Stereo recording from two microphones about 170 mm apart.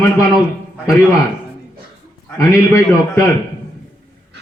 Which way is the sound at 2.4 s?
20° left (ahead or behind).